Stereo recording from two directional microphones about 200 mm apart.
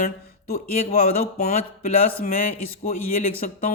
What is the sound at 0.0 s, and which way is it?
Speech, 50° left (ahead or behind).